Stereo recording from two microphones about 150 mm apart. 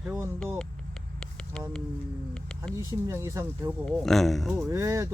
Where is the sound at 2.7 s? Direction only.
20° right (ahead or behind).